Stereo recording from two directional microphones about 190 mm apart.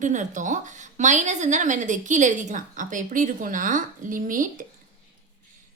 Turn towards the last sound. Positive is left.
turn(degrees=-45)  # may be behind; listen again after turning